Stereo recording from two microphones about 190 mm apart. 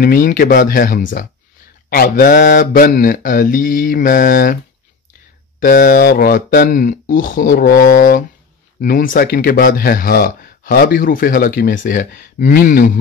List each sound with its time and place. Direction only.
0.0 s speech: 50° left (ahead or behind)
5.6 s speech: 45° left (ahead or behind)